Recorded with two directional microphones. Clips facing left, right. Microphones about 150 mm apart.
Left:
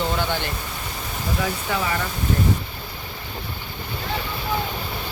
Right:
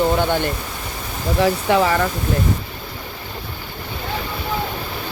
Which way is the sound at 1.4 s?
70° right (ahead or behind).